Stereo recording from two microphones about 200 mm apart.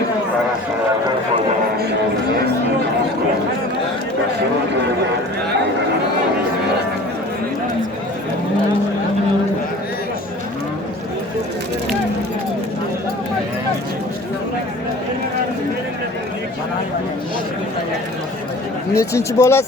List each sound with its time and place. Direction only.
18.9 s speech: 15° left (ahead or behind)